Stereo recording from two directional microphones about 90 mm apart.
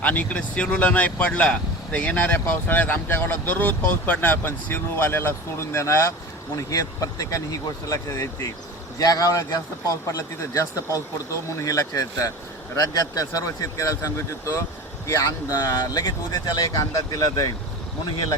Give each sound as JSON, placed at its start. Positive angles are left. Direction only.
{"t": 0.0, "sound": "speech", "side_deg": 20}